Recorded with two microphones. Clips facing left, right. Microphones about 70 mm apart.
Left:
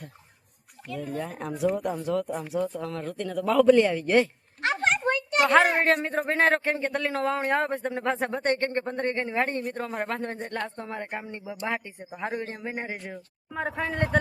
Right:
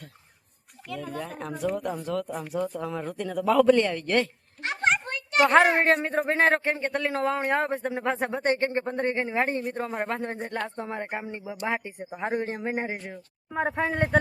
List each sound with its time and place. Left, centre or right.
0.9 s speech: centre
5.4 s speech: centre
10.8 s speech: centre
12.8 s speech: centre
13.5 s speech: right